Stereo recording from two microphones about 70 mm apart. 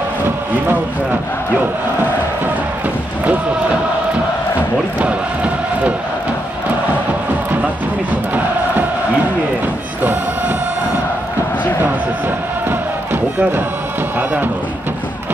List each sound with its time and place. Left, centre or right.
5.0 s chant: centre
12.6 s music: right